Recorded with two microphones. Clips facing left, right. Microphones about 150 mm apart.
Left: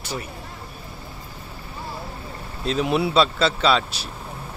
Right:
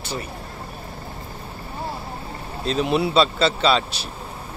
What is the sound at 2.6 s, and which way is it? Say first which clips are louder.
Speech: right 1 dB; 5° left (ahead or behind).